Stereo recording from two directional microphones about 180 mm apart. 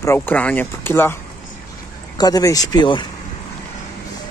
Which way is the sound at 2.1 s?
20° left (ahead or behind).